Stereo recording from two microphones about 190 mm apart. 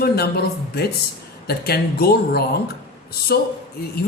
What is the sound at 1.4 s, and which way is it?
Speech, 55° left (ahead or behind).